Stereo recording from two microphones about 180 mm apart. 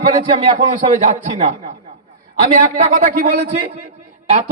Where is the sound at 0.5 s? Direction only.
45° right (ahead or behind).